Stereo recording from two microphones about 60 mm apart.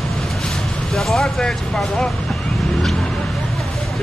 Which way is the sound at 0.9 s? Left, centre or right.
Centre.